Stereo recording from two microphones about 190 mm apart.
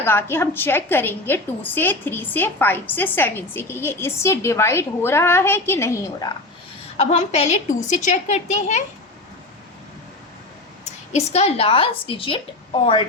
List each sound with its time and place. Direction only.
0.0 s a woman's voice: 10° left (ahead or behind)
6.9 s a woman's voice: 35° left (ahead or behind)
10.8 s a woman's voice: 35° left (ahead or behind)